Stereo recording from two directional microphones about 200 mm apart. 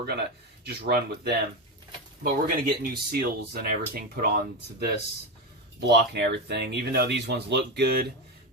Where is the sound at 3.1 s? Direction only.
50° right (ahead or behind).